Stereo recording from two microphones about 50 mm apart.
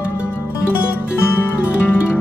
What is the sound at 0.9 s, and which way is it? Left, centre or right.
Music, left.